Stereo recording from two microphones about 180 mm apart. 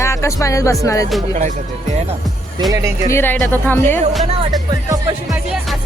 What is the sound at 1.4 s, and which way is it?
Speech, 40° right (ahead or behind).